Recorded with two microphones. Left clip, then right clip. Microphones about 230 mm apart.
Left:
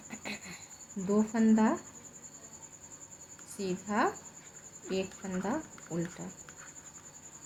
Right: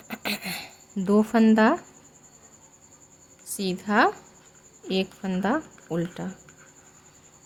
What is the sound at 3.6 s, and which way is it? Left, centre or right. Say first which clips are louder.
A woman's voice: right 9 dB; right.